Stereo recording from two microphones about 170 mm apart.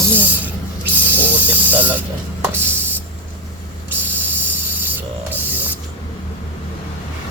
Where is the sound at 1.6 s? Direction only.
10° right (ahead or behind).